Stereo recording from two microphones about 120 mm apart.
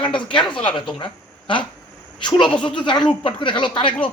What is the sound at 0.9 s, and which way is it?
Speech, 45° left (ahead or behind).